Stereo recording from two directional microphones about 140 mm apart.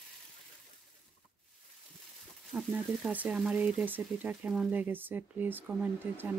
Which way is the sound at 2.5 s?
5° right (ahead or behind).